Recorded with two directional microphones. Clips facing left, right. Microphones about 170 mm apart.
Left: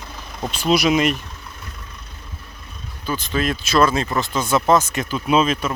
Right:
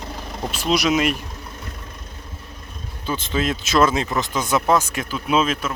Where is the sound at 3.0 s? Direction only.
25° right (ahead or behind).